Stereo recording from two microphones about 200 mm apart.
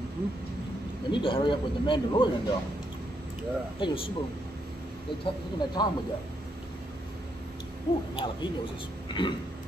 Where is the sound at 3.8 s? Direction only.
25° left (ahead or behind).